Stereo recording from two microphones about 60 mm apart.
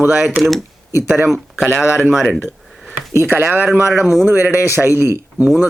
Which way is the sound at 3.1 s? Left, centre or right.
Right.